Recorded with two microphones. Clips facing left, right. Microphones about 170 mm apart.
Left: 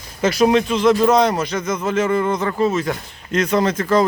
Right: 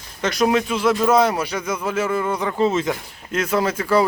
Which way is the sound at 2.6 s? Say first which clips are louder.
Right 1 dB; 25° right (ahead or behind).